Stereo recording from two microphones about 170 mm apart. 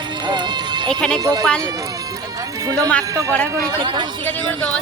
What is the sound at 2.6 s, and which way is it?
Speech, 20° right (ahead or behind).